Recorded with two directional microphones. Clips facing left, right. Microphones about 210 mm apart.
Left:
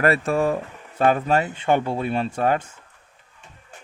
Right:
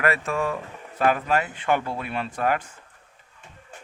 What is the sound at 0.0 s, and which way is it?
Speech, 35° left (ahead or behind).